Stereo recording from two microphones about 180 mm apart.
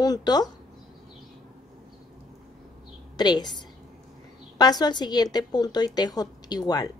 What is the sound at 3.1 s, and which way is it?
Speech, 20° left (ahead or behind).